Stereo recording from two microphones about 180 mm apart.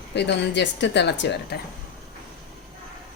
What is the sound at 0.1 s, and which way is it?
A woman's voice, 75° left (ahead or behind).